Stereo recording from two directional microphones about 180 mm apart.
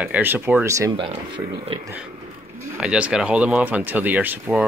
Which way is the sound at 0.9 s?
30° right (ahead or behind).